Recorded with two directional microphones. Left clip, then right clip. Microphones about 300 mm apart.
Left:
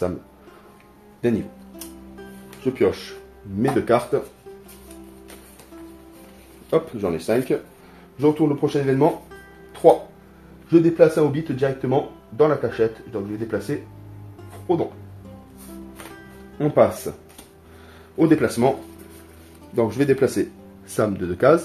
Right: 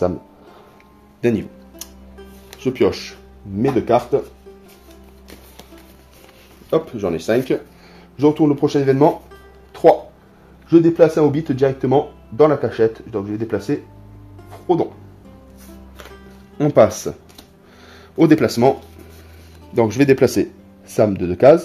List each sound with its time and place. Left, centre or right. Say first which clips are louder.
1.2 s speech: right 4 dB; right
2.6 s speech: right 3 dB; right
3.6 s speech: right 3 dB; centre
6.7 s speech: right 2 dB; centre
8.2 s speech: right 4 dB; right
10.7 s speech: right 3 dB; right
16.5 s speech: right 4 dB; right
18.1 s speech: right 4 dB; right
19.7 s speech: right 5 dB; right